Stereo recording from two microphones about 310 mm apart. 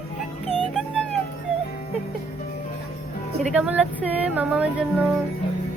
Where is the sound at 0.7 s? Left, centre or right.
Centre.